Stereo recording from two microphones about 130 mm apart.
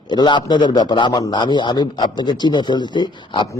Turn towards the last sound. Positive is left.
turn(degrees=35)  # may be behind; listen again after turning